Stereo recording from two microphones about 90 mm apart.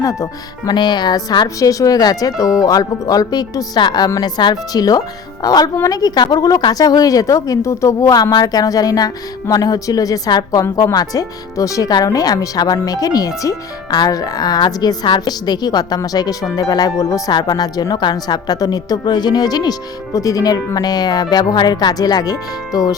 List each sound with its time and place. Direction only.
0.0 s speech: 35° left (ahead or behind)
0.7 s a woman's voice: 55° left (ahead or behind)
1.5 s a woman's voice: 40° left (ahead or behind)